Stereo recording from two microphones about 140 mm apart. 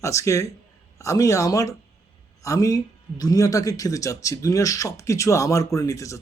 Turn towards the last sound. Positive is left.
turn(degrees=20)  # may be behind; listen again after turning